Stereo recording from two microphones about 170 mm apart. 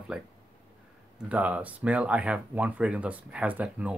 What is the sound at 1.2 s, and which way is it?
Speech, 10° right (ahead or behind).